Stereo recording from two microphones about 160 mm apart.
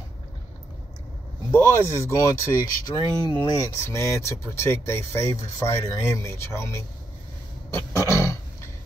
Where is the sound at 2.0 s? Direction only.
20° left (ahead or behind).